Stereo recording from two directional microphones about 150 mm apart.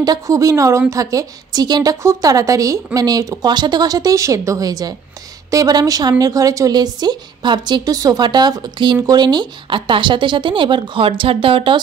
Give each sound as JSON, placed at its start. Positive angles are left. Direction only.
{"t": 0.0, "sound": "a woman's voice", "side_deg": -25}